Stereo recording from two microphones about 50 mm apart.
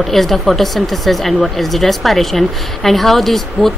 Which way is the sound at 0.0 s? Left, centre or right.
Centre.